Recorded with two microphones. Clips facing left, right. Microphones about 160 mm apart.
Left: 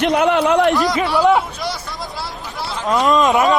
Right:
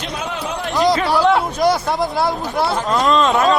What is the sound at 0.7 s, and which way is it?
Speech, 20° right (ahead or behind).